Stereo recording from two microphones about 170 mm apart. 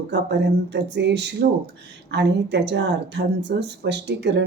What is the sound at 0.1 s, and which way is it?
Speech, 85° right.